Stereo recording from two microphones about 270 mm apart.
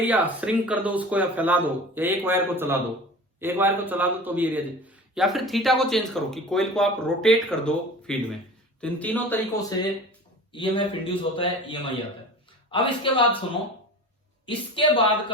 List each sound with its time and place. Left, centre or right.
0.0 s a man's voice: centre
14.4 s a man's voice: centre